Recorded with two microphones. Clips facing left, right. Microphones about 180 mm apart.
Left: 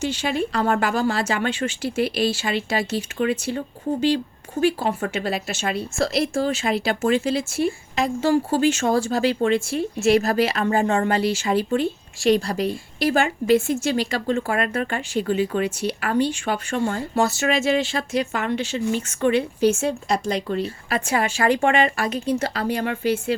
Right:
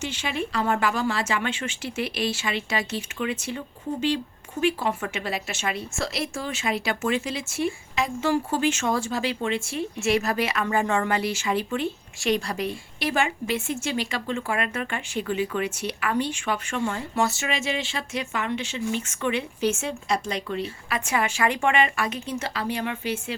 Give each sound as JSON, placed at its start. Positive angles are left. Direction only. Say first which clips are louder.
{"t": 0.0, "sound": "speech", "louder": "left 6 dB", "side_deg": 35}